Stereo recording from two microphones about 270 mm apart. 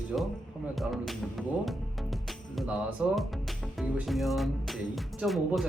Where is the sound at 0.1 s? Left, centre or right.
Centre.